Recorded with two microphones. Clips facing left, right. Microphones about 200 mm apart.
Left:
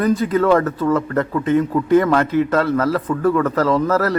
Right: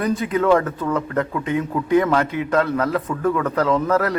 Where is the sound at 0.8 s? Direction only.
Centre (ahead or behind).